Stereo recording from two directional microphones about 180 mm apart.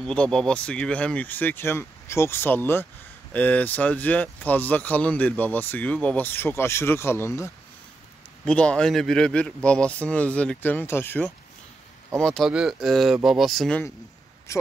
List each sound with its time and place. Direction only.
0.0 s speech: 5° left (ahead or behind)
14.5 s speech: 15° left (ahead or behind)